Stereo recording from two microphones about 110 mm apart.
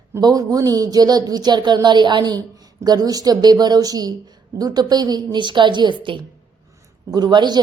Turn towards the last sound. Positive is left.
turn(degrees=-40)  # may be behind; listen again after turning